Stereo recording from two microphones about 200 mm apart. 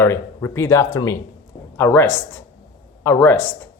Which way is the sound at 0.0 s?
15° left (ahead or behind).